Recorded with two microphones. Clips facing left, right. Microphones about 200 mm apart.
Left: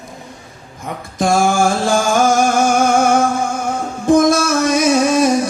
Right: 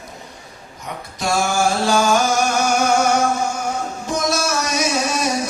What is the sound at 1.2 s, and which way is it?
Music, 50° left (ahead or behind).